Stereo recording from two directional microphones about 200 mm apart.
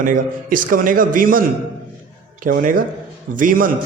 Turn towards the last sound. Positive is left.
turn(degrees=-45)  # may be behind; listen again after turning